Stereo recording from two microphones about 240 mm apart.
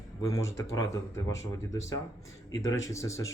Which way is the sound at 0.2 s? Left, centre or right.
Centre.